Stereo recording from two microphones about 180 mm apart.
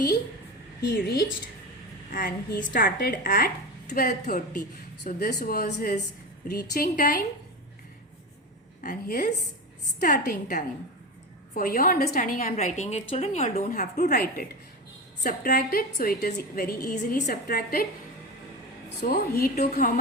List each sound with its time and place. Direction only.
0.8 s a woman's voice: 60° left (ahead or behind)
2.6 s a woman's voice: 50° left (ahead or behind)
8.8 s a woman's voice: 50° left (ahead or behind)
19.0 s a woman's voice: 55° left (ahead or behind)